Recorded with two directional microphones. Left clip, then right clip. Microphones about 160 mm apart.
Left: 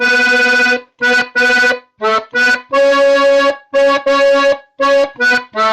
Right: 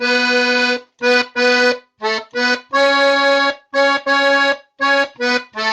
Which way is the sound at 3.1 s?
5° right (ahead or behind).